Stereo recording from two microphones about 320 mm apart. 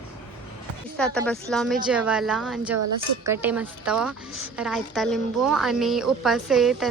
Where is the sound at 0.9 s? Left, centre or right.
Centre.